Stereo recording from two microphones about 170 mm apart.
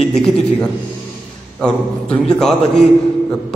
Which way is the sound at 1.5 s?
5° left (ahead or behind).